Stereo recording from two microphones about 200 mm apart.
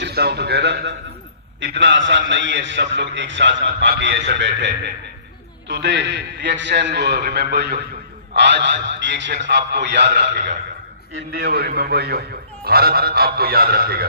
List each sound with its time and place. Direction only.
0.0 s a man's voice: 55° right (ahead or behind)